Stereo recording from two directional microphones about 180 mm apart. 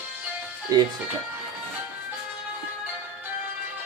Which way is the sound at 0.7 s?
20° right (ahead or behind).